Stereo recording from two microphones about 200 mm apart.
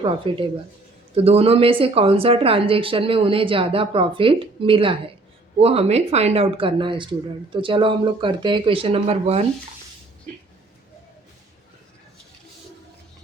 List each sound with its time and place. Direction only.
0.0 s a woman's voice: 25° right (ahead or behind)